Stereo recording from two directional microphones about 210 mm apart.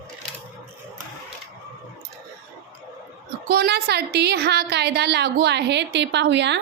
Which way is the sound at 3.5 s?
50° right (ahead or behind).